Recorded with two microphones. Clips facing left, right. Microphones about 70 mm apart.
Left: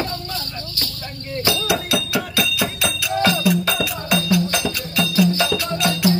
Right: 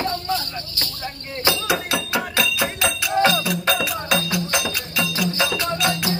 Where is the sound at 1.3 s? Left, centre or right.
Right.